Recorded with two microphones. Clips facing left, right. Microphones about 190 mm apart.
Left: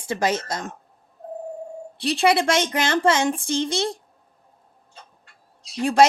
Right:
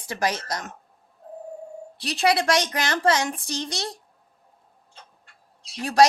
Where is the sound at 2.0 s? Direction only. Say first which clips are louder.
Left 3 dB; 30° left (ahead or behind).